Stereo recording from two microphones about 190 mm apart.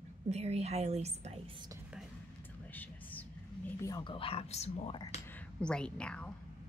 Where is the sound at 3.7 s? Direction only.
15° left (ahead or behind); by 5.0 s 30° left (ahead or behind).